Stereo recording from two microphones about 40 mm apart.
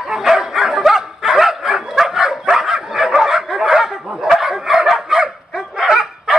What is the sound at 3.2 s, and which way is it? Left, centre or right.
Snicker, centre.